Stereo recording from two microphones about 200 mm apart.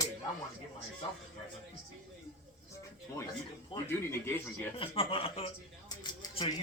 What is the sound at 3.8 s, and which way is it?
Speech, 10° left (ahead or behind).